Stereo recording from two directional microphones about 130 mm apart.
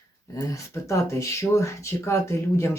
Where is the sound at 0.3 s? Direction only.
20° left (ahead or behind).